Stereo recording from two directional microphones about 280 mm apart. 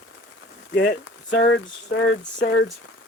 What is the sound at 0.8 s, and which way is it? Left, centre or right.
Speech, left.